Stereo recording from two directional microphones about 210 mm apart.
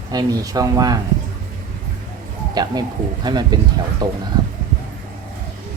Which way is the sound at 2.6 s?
20° right (ahead or behind).